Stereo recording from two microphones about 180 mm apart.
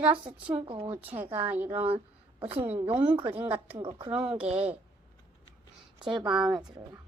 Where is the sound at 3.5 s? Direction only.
15° right (ahead or behind).